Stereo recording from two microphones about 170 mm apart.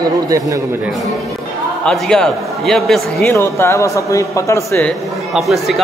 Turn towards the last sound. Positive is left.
turn(degrees=0)  # may be behind; listen again after turning